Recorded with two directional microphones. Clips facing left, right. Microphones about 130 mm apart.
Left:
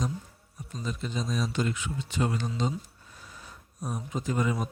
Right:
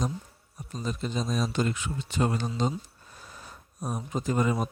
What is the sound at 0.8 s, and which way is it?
Speech, 40° right (ahead or behind).